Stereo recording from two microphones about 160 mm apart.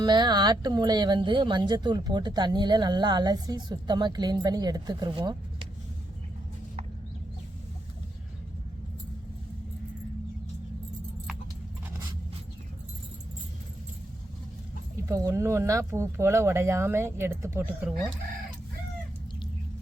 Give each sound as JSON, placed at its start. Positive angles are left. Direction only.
{"t": 0.0, "sound": "speech", "side_deg": -25}
{"t": 15.0, "sound": "speech", "side_deg": -20}